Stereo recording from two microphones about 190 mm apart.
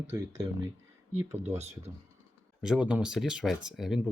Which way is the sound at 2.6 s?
5° right (ahead or behind).